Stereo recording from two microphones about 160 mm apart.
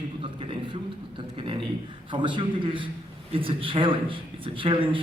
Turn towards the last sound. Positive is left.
turn(degrees=-30)  # may be behind; listen again after turning